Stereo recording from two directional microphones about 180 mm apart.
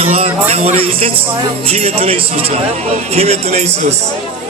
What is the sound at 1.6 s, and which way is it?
Speech, 35° right (ahead or behind).